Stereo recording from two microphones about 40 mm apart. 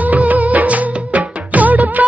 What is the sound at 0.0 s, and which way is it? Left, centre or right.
Music, right.